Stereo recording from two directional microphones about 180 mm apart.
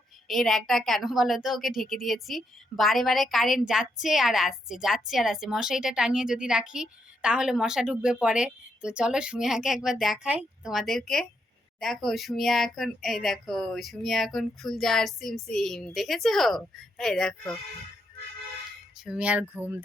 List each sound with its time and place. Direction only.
0.3 s a woman's voice: centre (ahead or behind)
19.0 s speech: 5° right (ahead or behind)